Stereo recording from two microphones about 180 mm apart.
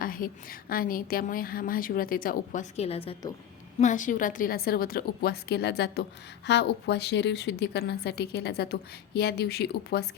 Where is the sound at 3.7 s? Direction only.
45° left (ahead or behind).